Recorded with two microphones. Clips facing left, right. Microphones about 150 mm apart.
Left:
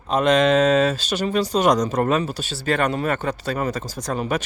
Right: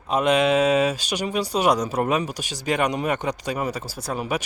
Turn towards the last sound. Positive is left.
turn(degrees=-10)  # may be behind; listen again after turning